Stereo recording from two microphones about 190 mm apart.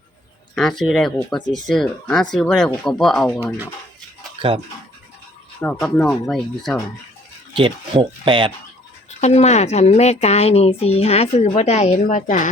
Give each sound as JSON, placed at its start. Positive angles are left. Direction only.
{"t": 0.5, "sound": "speech", "side_deg": 5}
{"t": 1.4, "sound": "speech", "side_deg": 20}
{"t": 1.6, "sound": "speech", "side_deg": 0}
{"t": 4.4, "sound": "speech", "side_deg": -30}
{"t": 5.5, "sound": "speech", "side_deg": 10}
{"t": 7.5, "sound": "speech", "side_deg": -25}
{"t": 9.0, "sound": "a woman's voice", "side_deg": 35}